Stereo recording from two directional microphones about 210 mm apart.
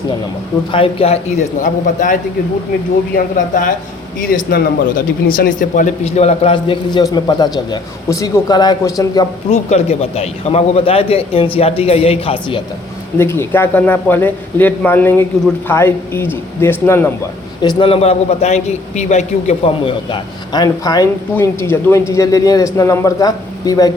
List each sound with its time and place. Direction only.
0.7 s a man's voice: 25° left (ahead or behind)
3.3 s a man's voice: 40° left (ahead or behind); by 9.2 s 20° left (ahead or behind)
9.5 s a man's voice: 30° left (ahead or behind)
13.1 s a man's voice: 10° left (ahead or behind)
17.6 s a man's voice: 25° left (ahead or behind)